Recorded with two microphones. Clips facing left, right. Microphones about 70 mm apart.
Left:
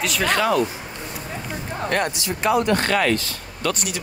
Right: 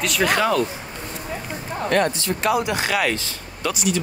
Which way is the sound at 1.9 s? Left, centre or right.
Centre.